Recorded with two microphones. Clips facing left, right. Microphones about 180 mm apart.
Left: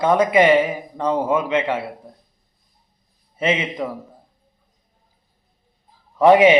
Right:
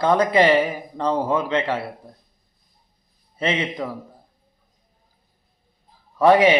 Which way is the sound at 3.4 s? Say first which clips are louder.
Left 3 dB; 20° left (ahead or behind).